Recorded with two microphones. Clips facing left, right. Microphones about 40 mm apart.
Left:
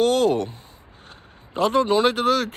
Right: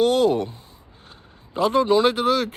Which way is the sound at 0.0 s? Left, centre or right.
Left.